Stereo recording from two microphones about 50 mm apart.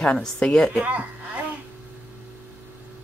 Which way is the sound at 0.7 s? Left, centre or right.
Right.